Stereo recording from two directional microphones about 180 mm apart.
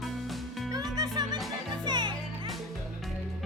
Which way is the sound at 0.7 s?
20° right (ahead or behind).